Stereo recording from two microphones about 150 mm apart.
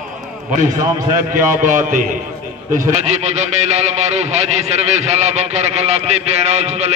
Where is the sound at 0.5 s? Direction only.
55° right (ahead or behind).